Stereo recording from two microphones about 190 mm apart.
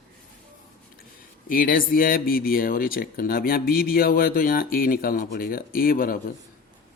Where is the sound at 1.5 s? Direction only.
50° left (ahead or behind).